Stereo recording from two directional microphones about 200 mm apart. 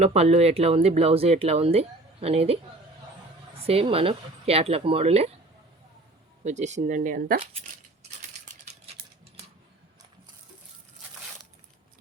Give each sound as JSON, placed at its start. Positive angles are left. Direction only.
{"t": 0.0, "sound": "speech", "side_deg": -30}
{"t": 3.7, "sound": "speech", "side_deg": -30}
{"t": 6.4, "sound": "speech", "side_deg": -35}